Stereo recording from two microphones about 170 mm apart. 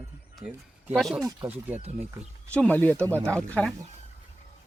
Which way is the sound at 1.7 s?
40° right (ahead or behind).